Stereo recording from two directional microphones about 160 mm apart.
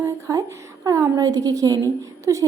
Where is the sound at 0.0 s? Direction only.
20° right (ahead or behind).